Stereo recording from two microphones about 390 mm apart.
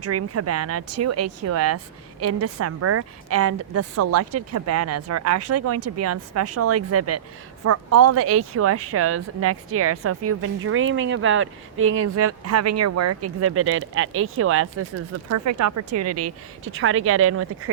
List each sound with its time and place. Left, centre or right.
0.0 s a woman's voice: right